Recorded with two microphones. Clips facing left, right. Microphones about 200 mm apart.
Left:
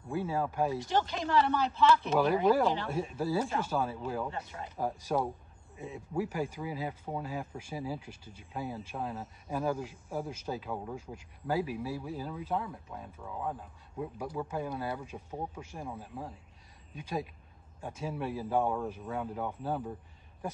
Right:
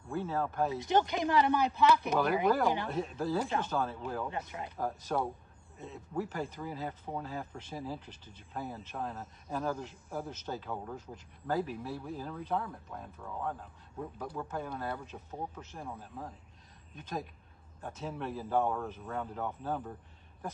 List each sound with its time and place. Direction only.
0.1 s speech: 10° left (ahead or behind)
0.7 s speech: 20° right (ahead or behind)
2.4 s speech: 20° left (ahead or behind)
4.3 s speech: 15° right (ahead or behind)
4.7 s speech: 10° left (ahead or behind)